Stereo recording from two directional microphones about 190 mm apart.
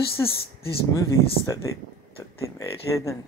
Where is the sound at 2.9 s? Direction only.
15° left (ahead or behind).